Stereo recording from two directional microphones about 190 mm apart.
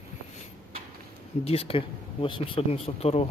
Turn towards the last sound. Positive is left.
turn(degrees=35)  # may be behind; listen again after turning